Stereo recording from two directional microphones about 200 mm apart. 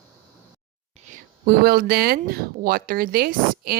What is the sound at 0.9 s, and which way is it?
Speech, 40° right (ahead or behind).